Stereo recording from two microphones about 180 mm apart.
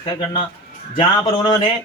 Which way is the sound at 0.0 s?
25° left (ahead or behind).